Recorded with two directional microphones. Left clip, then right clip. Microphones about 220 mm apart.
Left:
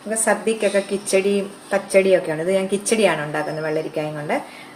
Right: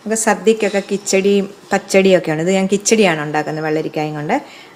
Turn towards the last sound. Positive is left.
turn(degrees=-40)  # may be behind; listen again after turning